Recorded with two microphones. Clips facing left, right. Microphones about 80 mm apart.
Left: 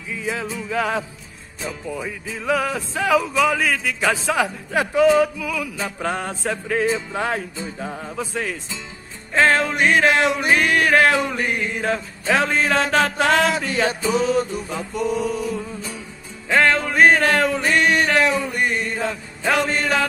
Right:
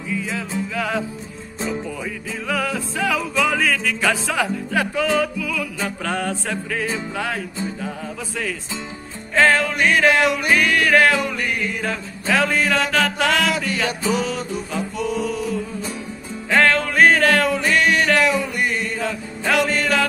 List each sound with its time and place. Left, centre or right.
0.2 s music: left
2.4 s music: left
9.3 s music: left
16.4 s music: left